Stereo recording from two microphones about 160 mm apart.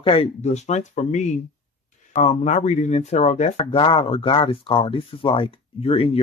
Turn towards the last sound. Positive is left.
turn(degrees=35)  # may be behind; listen again after turning